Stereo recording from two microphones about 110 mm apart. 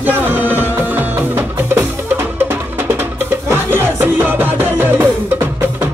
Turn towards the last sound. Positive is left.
turn(degrees=-15)  # may be behind; listen again after turning